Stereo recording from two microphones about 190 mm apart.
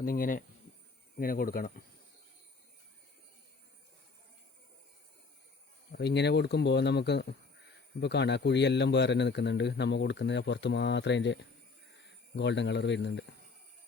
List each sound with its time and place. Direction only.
0.0 s speech: 50° left (ahead or behind)
5.9 s a man's voice: 60° left (ahead or behind)
12.4 s a man's voice: 70° left (ahead or behind)